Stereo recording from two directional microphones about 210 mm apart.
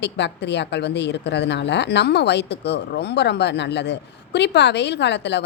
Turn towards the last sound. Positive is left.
turn(degrees=55)  # may be behind; listen again after turning